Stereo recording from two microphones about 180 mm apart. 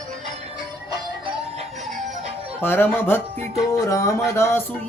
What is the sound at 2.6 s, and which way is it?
Music, 10° left (ahead or behind).